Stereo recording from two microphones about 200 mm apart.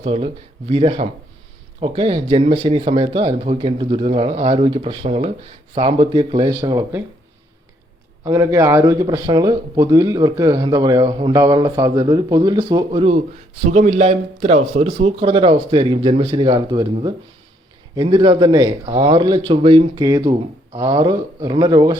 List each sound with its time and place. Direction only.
0.0 s a man's voice: 30° right (ahead or behind)
8.2 s a man's voice: 15° right (ahead or behind)